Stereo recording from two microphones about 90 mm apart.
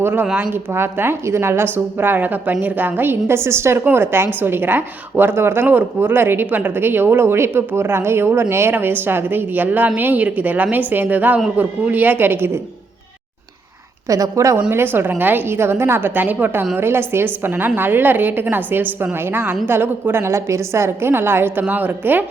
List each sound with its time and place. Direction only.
0.0 s a woman's voice: 20° right (ahead or behind)
14.1 s a woman's voice: 40° right (ahead or behind)
14.7 s a woman's voice: 25° right (ahead or behind)